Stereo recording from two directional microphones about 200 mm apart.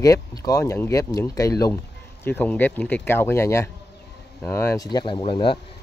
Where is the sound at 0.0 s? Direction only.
15° left (ahead or behind).